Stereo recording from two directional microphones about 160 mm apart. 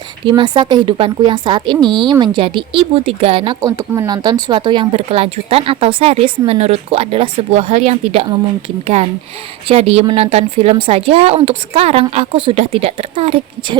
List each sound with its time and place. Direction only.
0.3 s speech: 30° right (ahead or behind)
3.6 s speech: 20° right (ahead or behind); by 8.3 s 40° right (ahead or behind)
9.6 s speech: 40° right (ahead or behind)